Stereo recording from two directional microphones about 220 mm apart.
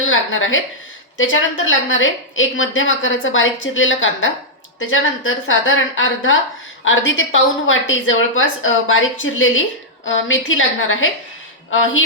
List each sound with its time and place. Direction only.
0.0 s a woman's voice: 60° left (ahead or behind)